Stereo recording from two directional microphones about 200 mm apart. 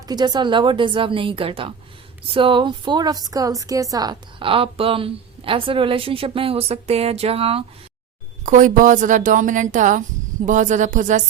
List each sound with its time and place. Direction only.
0.1 s a woman's voice: 20° right (ahead or behind)
8.4 s a woman's voice: 40° right (ahead or behind)